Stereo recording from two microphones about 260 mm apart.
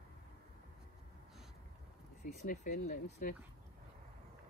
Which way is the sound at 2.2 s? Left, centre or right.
Left.